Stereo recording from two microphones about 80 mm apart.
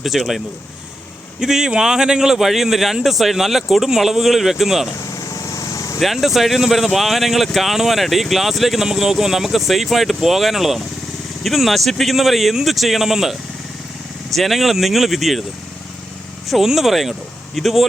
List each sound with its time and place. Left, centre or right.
0.0 s speech: centre
5.3 s vehicle: left
6.0 s speech: centre
14.3 s speech: centre
16.5 s speech: centre